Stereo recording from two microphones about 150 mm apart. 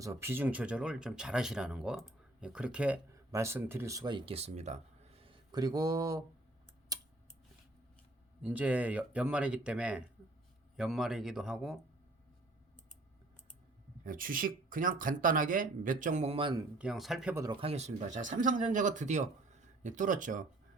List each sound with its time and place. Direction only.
0.0 s speech: 20° right (ahead or behind)
4.4 s speech: 45° right (ahead or behind); by 6.2 s 25° right (ahead or behind)
6.9 s a sound: 25° right (ahead or behind)
8.4 s speech: 10° right (ahead or behind)
14.0 s speech: 70° right (ahead or behind); by 16.6 s 30° right (ahead or behind)
16.7 s speech: 5° right (ahead or behind)
17.3 s speech: 25° right (ahead or behind)
17.6 s speech: 45° right (ahead or behind)